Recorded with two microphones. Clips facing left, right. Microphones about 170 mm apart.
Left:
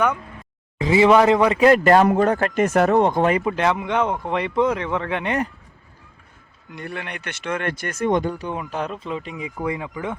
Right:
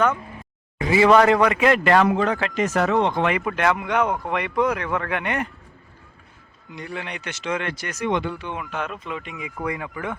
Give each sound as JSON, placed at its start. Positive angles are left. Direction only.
{"t": 0.8, "sound": "speech", "side_deg": 20}
{"t": 1.5, "sound": "speech", "side_deg": 35}
{"t": 3.4, "sound": "speech", "side_deg": 25}
{"t": 6.7, "sound": "speech", "side_deg": 55}
{"t": 9.6, "sound": "speech", "side_deg": 20}